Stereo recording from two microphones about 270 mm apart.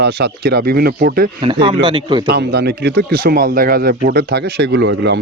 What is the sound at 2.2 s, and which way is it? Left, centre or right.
Speech, right.